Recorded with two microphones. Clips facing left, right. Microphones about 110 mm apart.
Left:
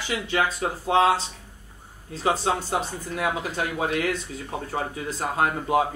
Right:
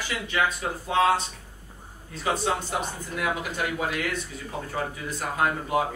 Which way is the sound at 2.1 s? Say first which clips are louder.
Left 3 dB; 30° left (ahead or behind).